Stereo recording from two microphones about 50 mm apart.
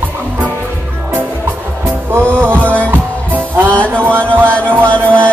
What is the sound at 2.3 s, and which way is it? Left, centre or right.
Music, right.